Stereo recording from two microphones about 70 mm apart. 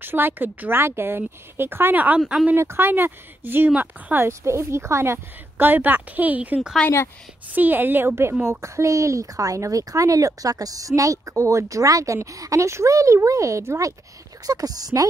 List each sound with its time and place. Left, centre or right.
0.0 s speech: right; by 2.5 s centre
2.5 s speech: right
4.3 s speech: right
6.8 s a woman's voice: centre
7.5 s a woman's voice: right
14.4 s a woman's voice: right